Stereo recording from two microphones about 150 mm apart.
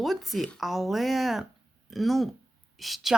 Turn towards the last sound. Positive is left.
turn(degrees=0)  # may be behind; listen again after turning